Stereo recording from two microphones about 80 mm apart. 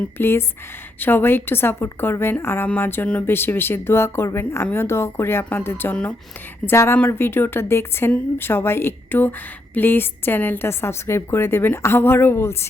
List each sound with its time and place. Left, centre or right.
0.2 s a woman's voice: left